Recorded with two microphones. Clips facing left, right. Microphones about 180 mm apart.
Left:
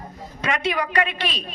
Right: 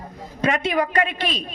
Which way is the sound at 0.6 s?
50° right (ahead or behind).